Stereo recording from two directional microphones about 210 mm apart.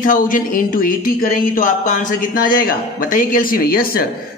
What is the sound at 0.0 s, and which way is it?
Speech, 40° left (ahead or behind).